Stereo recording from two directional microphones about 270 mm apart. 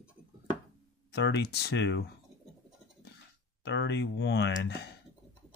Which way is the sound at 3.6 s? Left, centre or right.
Left.